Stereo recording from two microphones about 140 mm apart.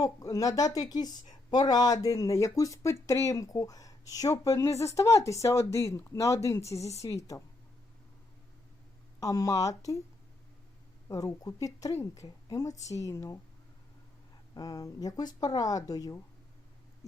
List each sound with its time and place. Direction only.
0.0 s speech: 25° left (ahead or behind)
9.2 s speech: 25° left (ahead or behind)
11.1 s speech: 25° left (ahead or behind)
14.5 s speech: 25° left (ahead or behind)